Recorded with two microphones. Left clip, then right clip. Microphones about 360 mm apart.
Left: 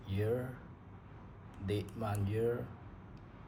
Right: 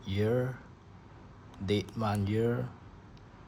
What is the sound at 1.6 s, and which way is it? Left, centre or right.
Speech, centre.